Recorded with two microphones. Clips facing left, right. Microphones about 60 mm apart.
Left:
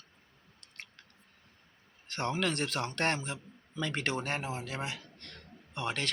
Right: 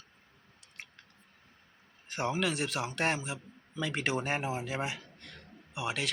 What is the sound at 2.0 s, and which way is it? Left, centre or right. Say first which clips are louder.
Speech: right 1 dB; centre.